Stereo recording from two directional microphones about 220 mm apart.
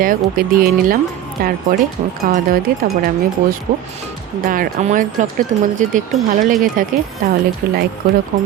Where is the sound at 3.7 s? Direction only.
40° right (ahead or behind).